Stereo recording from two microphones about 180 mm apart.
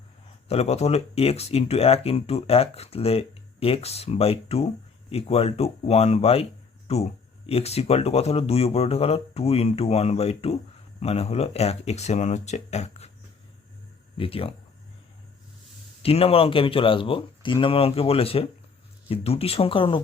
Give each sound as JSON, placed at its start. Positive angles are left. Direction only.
{"t": 0.4, "sound": "speech", "side_deg": 35}
{"t": 14.2, "sound": "speech", "side_deg": 30}
{"t": 16.0, "sound": "speech", "side_deg": 30}